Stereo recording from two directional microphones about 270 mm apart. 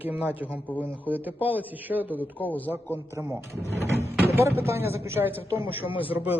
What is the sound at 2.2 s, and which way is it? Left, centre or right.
Speech, centre.